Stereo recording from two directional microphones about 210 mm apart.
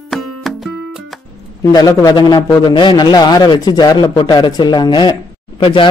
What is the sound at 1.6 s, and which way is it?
A man's voice, 15° left (ahead or behind).